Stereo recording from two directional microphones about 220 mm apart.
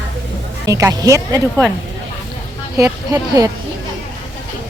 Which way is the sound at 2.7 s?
15° right (ahead or behind).